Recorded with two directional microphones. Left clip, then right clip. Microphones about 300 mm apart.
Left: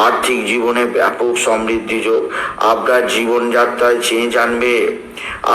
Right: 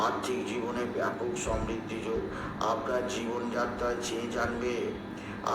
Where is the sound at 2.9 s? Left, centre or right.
Left.